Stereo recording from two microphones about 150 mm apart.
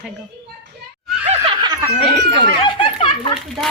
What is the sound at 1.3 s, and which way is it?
Snicker, 40° right (ahead or behind).